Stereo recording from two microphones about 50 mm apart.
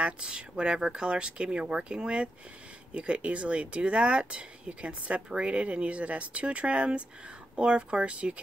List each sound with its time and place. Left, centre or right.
0.0 s speech: right